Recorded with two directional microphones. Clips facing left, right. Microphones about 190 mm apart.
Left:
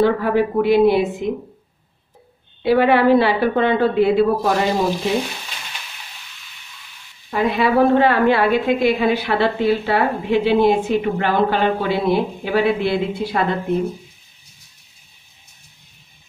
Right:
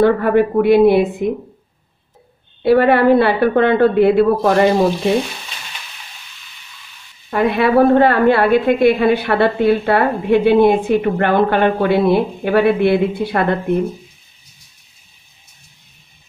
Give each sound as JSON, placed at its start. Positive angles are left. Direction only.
{"t": 0.0, "sound": "a woman's voice", "side_deg": -55}
{"t": 2.6, "sound": "a woman's voice", "side_deg": -55}
{"t": 7.2, "sound": "a woman's voice", "side_deg": -60}